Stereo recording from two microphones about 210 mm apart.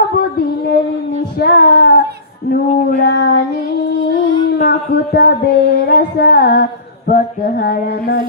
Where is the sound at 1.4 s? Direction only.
50° left (ahead or behind).